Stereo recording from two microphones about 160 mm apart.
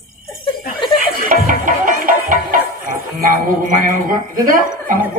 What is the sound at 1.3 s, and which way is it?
Music, 55° right (ahead or behind).